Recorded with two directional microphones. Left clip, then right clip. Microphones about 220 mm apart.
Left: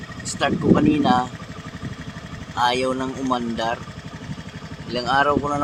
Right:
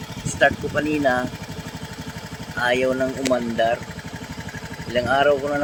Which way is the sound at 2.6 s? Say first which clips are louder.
Even; centre (ahead or behind).